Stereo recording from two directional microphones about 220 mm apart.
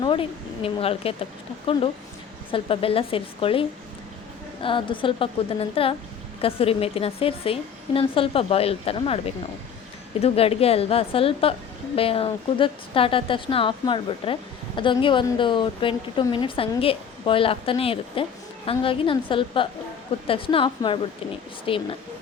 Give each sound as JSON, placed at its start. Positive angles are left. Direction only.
{"t": 0.0, "sound": "a woman's voice", "side_deg": 25}